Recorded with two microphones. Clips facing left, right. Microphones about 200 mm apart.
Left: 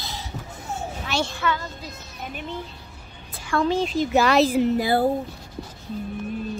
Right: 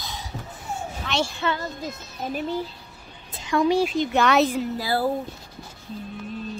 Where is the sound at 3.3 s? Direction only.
20° right (ahead or behind).